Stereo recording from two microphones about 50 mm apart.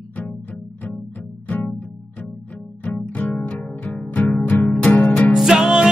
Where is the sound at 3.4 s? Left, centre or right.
Left.